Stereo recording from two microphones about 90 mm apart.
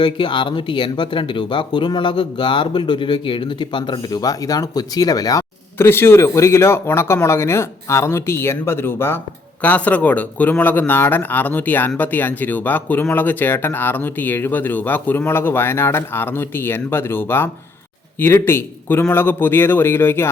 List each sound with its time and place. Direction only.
0.0 s speech: 70° left (ahead or behind)
4.2 s speech: 45° left (ahead or behind)
5.7 s speech: 25° left (ahead or behind)